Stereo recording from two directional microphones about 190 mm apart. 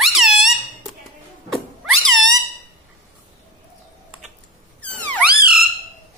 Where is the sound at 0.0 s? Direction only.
Centre (ahead or behind).